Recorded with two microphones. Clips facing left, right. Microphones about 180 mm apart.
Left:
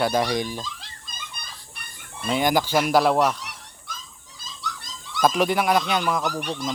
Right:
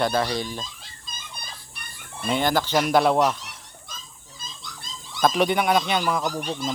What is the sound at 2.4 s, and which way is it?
Speech, 15° left (ahead or behind).